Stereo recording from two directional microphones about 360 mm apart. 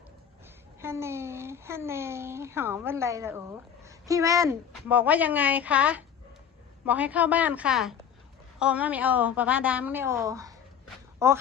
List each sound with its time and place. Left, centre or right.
0.8 s a child's voice: centre